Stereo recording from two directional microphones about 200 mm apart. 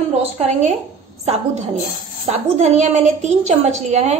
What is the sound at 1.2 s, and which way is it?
A woman's voice, 30° right (ahead or behind).